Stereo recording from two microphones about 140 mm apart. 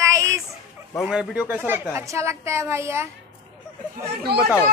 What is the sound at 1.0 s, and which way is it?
A man's voice, 5° right (ahead or behind).